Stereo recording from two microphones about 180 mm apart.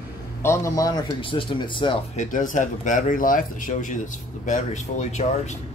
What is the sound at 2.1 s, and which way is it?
Speech, 45° left (ahead or behind).